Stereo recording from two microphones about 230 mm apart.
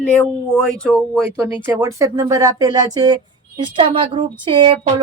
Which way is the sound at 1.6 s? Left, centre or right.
Centre.